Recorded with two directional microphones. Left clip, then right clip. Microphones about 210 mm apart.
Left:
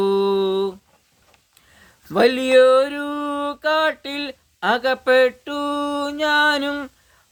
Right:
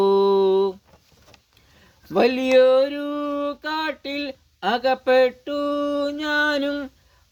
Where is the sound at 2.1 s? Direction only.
15° left (ahead or behind).